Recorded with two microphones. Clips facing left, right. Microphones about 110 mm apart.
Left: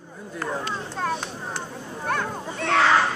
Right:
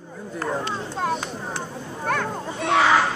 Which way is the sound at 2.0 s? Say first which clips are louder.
Right 2 dB; 50° right (ahead or behind).